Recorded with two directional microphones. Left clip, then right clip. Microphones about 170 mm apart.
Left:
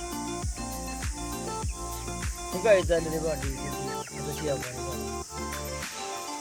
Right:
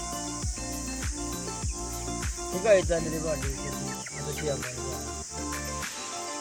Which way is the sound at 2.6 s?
55° left (ahead or behind).